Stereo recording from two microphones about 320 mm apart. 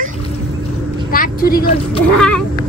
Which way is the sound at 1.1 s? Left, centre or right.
Left.